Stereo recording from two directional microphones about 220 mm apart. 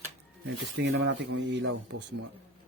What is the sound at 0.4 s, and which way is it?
Speech, 50° right (ahead or behind).